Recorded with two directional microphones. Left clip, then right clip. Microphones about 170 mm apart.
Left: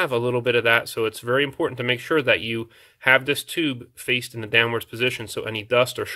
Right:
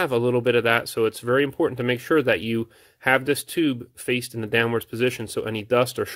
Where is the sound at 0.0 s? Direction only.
45° right (ahead or behind).